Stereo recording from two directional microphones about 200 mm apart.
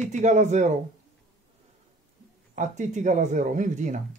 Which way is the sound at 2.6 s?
35° right (ahead or behind).